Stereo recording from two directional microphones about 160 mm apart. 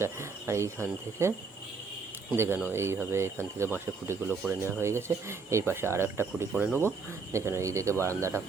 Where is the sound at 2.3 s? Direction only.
15° right (ahead or behind).